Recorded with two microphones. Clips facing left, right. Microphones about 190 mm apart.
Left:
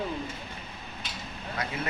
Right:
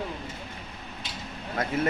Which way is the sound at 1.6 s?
50° right (ahead or behind).